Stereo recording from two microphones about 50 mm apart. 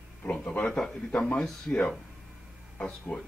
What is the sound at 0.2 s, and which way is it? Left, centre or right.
Speech, left.